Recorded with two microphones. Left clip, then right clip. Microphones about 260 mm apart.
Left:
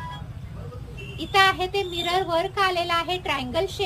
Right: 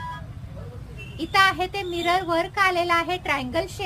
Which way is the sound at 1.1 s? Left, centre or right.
Centre.